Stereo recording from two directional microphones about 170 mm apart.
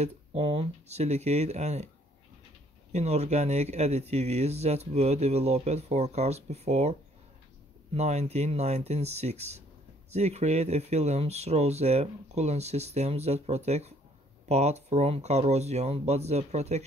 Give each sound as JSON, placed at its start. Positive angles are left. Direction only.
{"t": 0.0, "sound": "speech", "side_deg": -35}
{"t": 2.9, "sound": "speech", "side_deg": -40}